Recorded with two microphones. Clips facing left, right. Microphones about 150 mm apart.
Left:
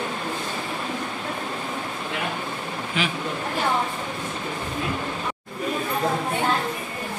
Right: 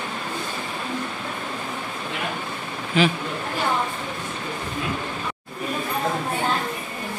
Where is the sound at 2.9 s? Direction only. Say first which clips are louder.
Right 8 dB; 35° right (ahead or behind).